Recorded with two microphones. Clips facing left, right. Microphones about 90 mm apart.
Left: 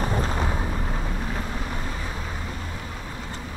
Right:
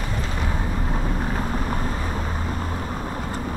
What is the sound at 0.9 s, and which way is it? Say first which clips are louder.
Vehicle: right 4 dB; 35° right (ahead or behind).